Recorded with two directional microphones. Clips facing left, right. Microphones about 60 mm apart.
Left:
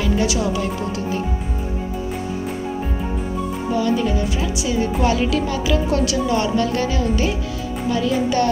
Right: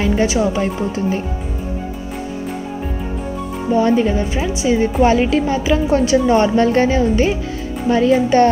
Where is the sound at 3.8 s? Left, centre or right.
Right.